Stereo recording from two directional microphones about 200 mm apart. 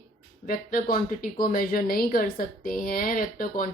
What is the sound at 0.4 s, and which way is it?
A woman's voice, 45° left (ahead or behind).